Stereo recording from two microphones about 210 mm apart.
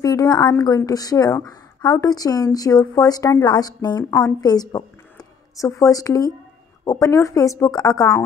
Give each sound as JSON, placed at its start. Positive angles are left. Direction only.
{"t": 0.0, "sound": "a woman's voice", "side_deg": 15}